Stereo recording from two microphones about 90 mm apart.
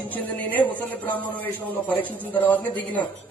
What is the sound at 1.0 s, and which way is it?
A man's voice, 20° left (ahead or behind).